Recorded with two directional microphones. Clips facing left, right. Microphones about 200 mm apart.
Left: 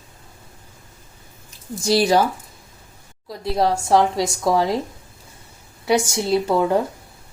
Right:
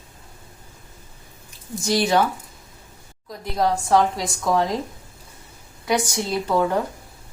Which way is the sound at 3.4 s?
30° left (ahead or behind).